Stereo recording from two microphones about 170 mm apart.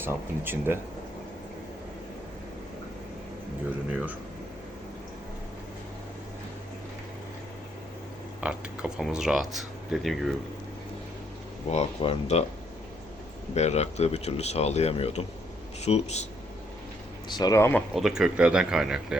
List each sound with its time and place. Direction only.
0.0 s speech: 15° right (ahead or behind)
8.4 s speech: 5° right (ahead or behind)
11.7 s speech: 35° left (ahead or behind)
13.5 s speech: 40° left (ahead or behind)
17.2 s speech: 25° left (ahead or behind)
17.9 s speech: 5° right (ahead or behind)